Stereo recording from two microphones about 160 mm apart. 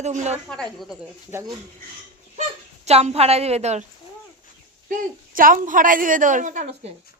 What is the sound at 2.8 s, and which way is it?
A woman's voice, 40° right (ahead or behind).